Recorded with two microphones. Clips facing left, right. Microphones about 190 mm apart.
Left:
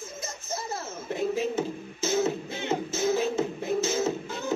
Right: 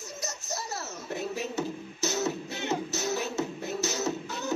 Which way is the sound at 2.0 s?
50° left (ahead or behind).